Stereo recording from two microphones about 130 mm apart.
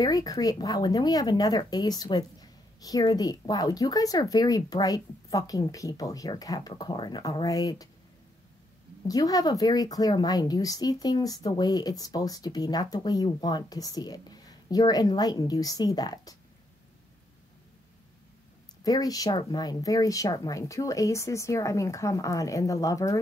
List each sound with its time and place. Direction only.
0.0 s speech: 30° left (ahead or behind)
9.0 s speech: 30° left (ahead or behind)
18.9 s speech: 30° left (ahead or behind)